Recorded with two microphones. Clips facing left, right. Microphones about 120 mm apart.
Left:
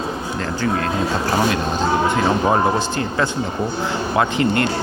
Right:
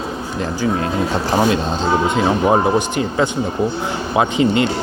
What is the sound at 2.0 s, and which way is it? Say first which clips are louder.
Speech: right 3 dB; 20° right (ahead or behind).